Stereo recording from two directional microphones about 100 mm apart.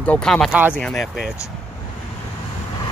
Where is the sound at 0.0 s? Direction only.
10° left (ahead or behind).